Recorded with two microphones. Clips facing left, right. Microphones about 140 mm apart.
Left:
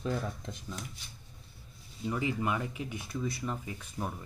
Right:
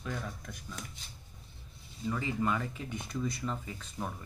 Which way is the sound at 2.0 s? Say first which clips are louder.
Left 1 dB; 15° left (ahead or behind).